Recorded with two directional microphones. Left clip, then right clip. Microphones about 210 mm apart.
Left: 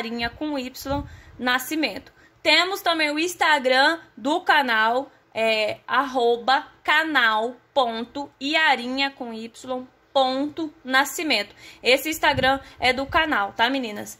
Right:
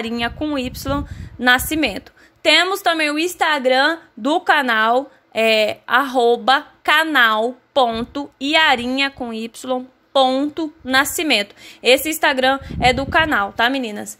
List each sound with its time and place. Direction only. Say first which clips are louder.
0.0 s a woman's voice: right 5 dB; 25° right (ahead or behind)